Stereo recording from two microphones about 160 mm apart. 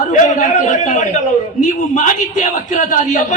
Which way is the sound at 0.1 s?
55° left (ahead or behind).